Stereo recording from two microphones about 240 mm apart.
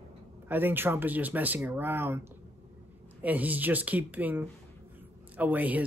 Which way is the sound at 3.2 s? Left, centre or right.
Centre.